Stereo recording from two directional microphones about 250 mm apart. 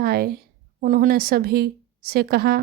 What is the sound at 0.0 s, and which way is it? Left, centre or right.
A woman's voice, right.